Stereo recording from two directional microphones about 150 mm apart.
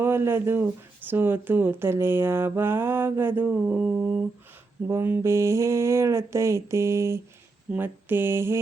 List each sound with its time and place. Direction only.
0.0 s speech: 15° right (ahead or behind)
4.9 s a sound: 15° right (ahead or behind)
7.7 s speech: 15° right (ahead or behind)